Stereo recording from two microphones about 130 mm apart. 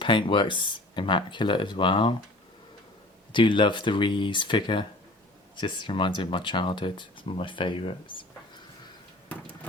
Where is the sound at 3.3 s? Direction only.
40° left (ahead or behind).